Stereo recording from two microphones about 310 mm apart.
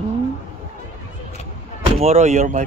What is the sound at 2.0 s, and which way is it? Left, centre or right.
Speech, right.